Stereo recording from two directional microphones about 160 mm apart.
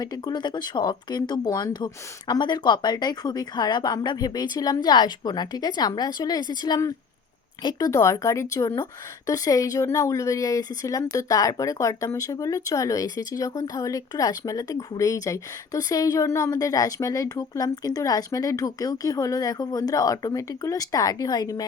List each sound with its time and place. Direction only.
0.0 s a woman's voice: 25° left (ahead or behind)